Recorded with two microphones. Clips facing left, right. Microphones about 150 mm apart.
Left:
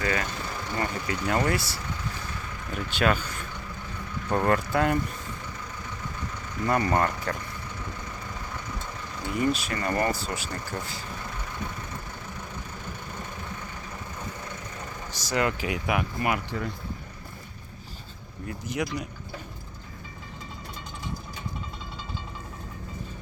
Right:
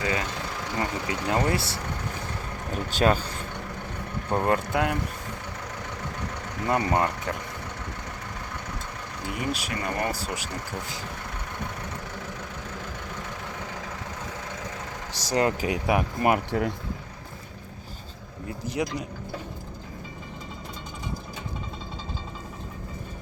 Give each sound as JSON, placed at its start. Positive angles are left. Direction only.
{"t": 0.0, "sound": "speech", "side_deg": -15}
{"t": 4.3, "sound": "speech", "side_deg": -20}
{"t": 6.7, "sound": "speech", "side_deg": -20}
{"t": 9.5, "sound": "speech", "side_deg": -10}
{"t": 15.1, "sound": "speech", "side_deg": -35}
{"t": 16.5, "sound": "speech", "side_deg": -65}
{"t": 18.4, "sound": "speech", "side_deg": -30}